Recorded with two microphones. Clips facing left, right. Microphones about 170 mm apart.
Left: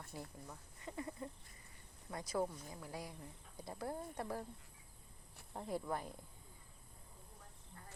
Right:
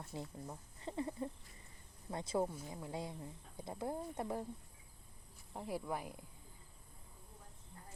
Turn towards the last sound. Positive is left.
turn(degrees=-10)  # may be behind; listen again after turning